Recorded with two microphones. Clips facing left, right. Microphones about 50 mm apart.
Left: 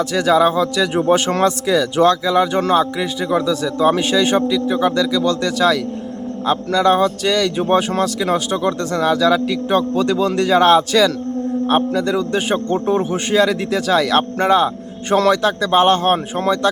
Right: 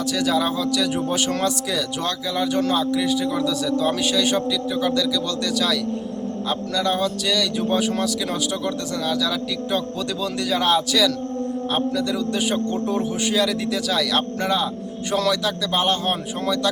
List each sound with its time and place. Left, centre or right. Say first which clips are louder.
0.0 s a man's voice: left 7 dB; left